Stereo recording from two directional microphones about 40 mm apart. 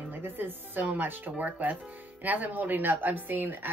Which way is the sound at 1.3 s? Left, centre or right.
Right.